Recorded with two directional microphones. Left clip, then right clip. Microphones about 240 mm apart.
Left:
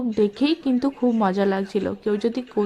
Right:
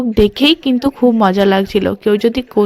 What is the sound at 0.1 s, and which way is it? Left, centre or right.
Speech, right.